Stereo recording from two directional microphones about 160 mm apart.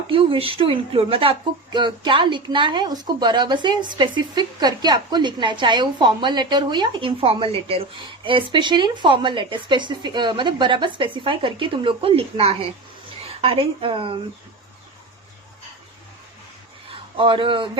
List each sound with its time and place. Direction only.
0.1 s a woman's voice: 35° right (ahead or behind)
16.9 s speech: 30° right (ahead or behind)